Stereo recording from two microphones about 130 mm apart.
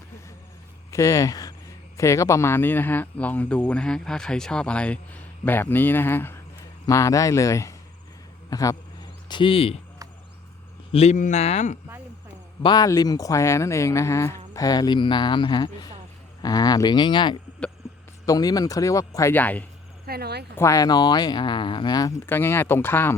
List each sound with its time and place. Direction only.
0.9 s speech: 25° left (ahead or behind)
8.4 s a sound: 30° left (ahead or behind); by 9.7 s 45° left (ahead or behind)
10.9 s speech: 60° left (ahead or behind)
12.6 s speech: 30° left (ahead or behind)
19.3 s speech: 15° left (ahead or behind)
20.6 s speech: 25° left (ahead or behind)
22.3 s speech: 15° left (ahead or behind)